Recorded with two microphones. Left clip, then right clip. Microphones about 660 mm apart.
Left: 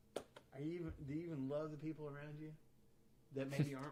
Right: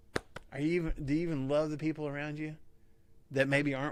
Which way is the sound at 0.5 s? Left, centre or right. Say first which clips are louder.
Right 15 dB; right.